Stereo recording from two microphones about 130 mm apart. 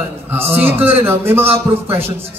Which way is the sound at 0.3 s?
15° right (ahead or behind).